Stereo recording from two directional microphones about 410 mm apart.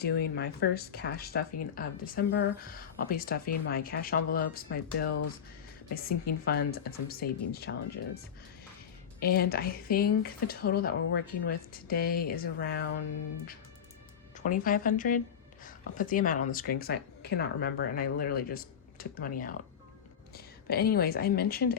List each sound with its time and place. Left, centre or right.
0.0 s speech: left
9.2 s speech: left
14.3 s a woman's voice: centre